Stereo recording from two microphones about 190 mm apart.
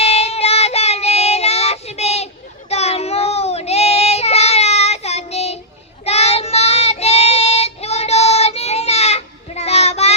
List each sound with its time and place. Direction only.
0.0 s child singing: 35° left (ahead or behind)